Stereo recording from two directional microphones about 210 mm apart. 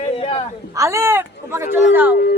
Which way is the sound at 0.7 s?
15° right (ahead or behind).